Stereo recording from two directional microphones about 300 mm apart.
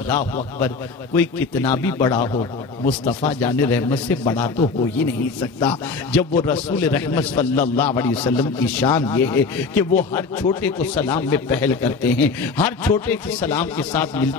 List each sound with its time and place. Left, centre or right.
1.1 s a man's voice: centre
2.8 s speech: left
3.3 s a man's voice: centre